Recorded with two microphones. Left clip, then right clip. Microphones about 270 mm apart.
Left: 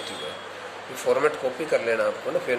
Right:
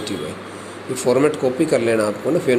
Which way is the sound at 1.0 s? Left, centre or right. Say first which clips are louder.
Right 6 dB; centre.